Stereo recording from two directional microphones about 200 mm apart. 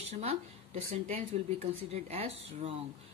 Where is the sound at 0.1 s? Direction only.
30° right (ahead or behind).